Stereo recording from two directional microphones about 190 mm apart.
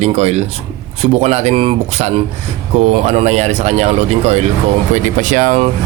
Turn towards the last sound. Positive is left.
turn(degrees=-35)  # may be behind; listen again after turning